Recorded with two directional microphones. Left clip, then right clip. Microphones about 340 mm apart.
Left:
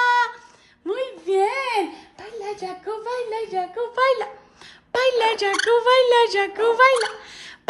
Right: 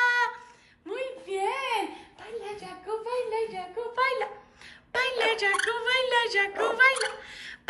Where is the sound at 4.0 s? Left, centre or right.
Centre.